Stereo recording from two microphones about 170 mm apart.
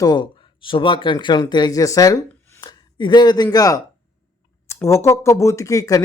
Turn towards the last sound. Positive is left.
turn(degrees=20)  # may be behind; listen again after turning